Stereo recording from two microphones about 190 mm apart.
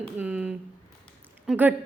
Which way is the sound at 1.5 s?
10° right (ahead or behind).